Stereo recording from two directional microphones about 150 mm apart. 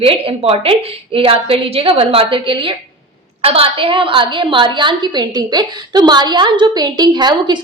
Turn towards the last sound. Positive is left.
turn(degrees=-30)  # may be behind; listen again after turning